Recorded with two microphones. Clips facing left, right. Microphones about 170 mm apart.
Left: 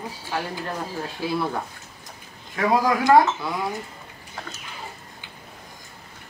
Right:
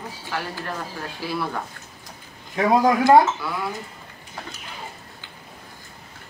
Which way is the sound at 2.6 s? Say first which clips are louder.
Right 3 dB; 25° right (ahead or behind).